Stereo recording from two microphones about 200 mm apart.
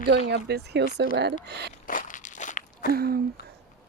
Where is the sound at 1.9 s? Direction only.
40° left (ahead or behind).